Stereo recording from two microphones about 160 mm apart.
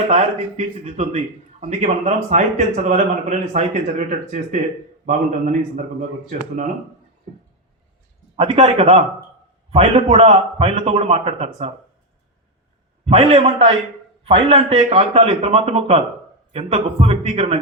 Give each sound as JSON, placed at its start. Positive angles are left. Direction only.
{"t": 0.1, "sound": "a man's voice", "side_deg": -45}
{"t": 8.4, "sound": "a man's voice", "side_deg": -40}
{"t": 13.1, "sound": "a man's voice", "side_deg": -40}